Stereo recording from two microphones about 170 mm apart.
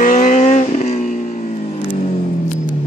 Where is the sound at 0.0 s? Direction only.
45° left (ahead or behind).